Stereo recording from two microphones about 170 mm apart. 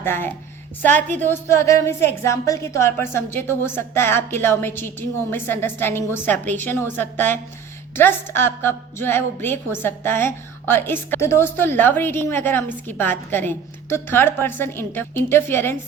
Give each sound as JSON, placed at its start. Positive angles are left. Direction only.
{"t": 0.0, "sound": "a woman's voice", "side_deg": 15}